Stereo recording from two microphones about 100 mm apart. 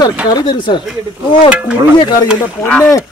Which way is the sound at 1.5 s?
10° right (ahead or behind).